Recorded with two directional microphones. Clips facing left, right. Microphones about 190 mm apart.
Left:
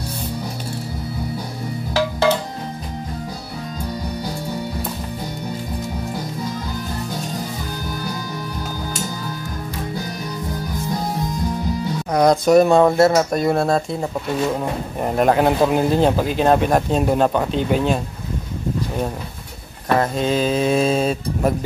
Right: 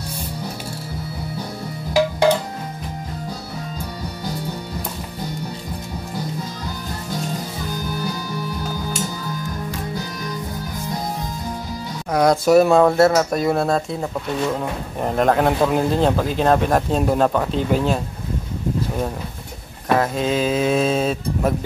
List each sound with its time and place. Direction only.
2.0 s guitar: 15° right (ahead or behind)
12.1 s speech: centre (ahead or behind)
19.9 s speech: centre (ahead or behind)